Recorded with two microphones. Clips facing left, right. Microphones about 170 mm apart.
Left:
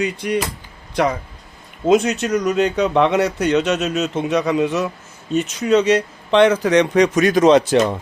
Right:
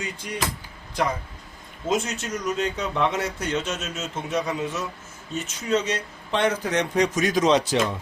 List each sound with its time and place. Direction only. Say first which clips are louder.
0.0 s speech: left 10 dB; 65° left (ahead or behind)